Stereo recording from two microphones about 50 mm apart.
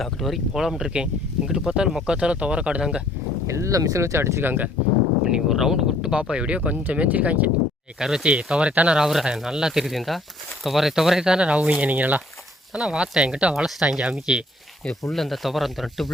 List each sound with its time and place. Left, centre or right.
0.0 s speech: centre
2.1 s speech: right
3.4 s speech: right
4.4 s speech: right
5.2 s speech: centre; by 7.5 s right
7.9 s speech: centre
8.7 s speech: right
9.0 s speech: centre
11.6 s speech: right
12.7 s speech: centre
15.1 s speech: centre